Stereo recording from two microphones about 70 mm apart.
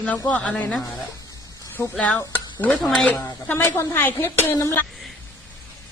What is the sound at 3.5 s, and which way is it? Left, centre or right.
Speech, left.